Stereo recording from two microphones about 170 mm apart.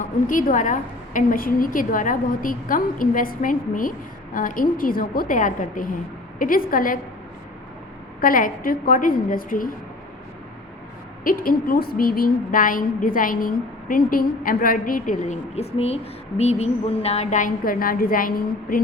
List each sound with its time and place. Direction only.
0.0 s a woman's voice: 50° left (ahead or behind)
8.2 s speech: 55° left (ahead or behind)
11.2 s speech: 55° left (ahead or behind)